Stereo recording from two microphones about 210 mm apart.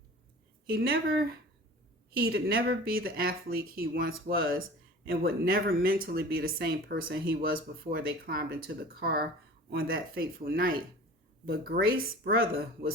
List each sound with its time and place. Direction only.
2.1 s speech: 45° right (ahead or behind)